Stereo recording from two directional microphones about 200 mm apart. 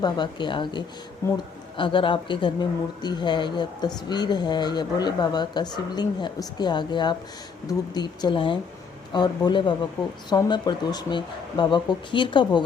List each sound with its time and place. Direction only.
0.0 s a woman's voice: 20° left (ahead or behind)